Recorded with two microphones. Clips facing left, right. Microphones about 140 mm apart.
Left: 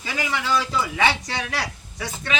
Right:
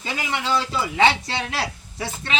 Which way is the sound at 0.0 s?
25° right (ahead or behind).